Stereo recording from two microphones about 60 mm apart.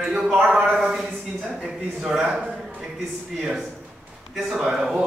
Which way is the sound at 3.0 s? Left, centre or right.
Centre.